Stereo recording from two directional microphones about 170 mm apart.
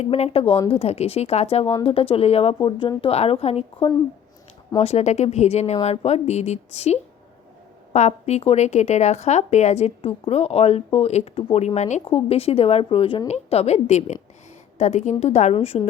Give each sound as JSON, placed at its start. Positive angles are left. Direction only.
{"t": 0.0, "sound": "a woman's voice", "side_deg": 35}